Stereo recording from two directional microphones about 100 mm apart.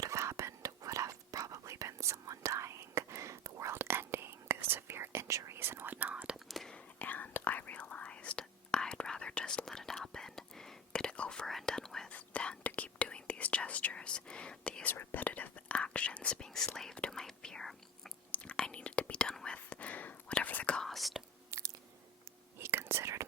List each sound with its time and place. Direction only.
0.0 s whispering: 30° right (ahead or behind); by 6.3 s 15° right (ahead or behind)
6.5 s whispering: centre (ahead or behind)
7.0 s whispering: 15° left (ahead or behind); by 21.2 s centre (ahead or behind)
21.5 s chewing: 30° right (ahead or behind)
22.5 s whispering: 25° right (ahead or behind)